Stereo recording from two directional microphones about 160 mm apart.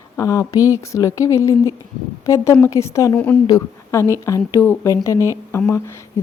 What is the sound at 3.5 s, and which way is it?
A woman's voice, 20° left (ahead or behind).